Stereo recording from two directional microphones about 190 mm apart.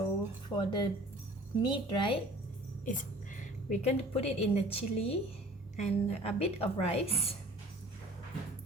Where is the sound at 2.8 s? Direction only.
45° left (ahead or behind).